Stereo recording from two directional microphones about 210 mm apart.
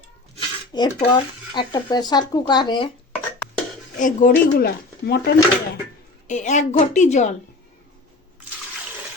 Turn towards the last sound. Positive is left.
turn(degrees=35)  # may be behind; listen again after turning